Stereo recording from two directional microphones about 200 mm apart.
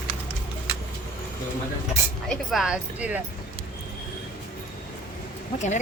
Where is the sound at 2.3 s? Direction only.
Centre (ahead or behind).